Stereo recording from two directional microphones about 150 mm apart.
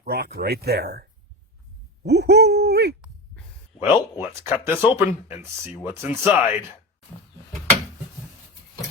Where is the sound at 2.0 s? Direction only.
90° right.